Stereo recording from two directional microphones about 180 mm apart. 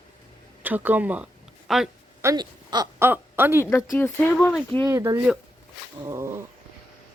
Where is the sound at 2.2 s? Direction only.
25° right (ahead or behind).